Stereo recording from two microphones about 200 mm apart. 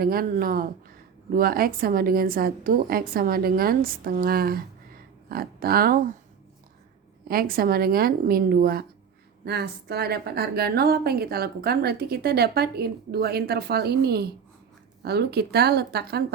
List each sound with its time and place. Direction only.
0.0 s a woman's voice: 45° right (ahead or behind)
7.3 s a woman's voice: 50° right (ahead or behind)